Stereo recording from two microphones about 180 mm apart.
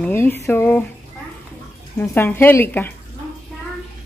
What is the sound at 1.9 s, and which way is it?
Speech, 10° left (ahead or behind).